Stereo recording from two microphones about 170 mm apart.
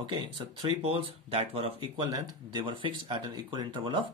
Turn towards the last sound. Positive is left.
turn(degrees=-30)  # may be behind; listen again after turning